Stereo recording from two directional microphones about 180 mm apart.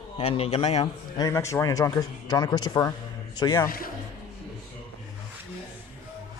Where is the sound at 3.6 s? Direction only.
50° left (ahead or behind).